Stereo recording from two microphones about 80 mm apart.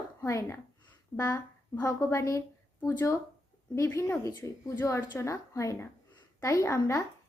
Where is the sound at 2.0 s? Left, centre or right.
Left.